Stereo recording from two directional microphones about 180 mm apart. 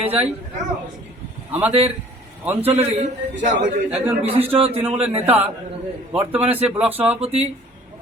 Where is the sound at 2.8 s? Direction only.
40° right (ahead or behind).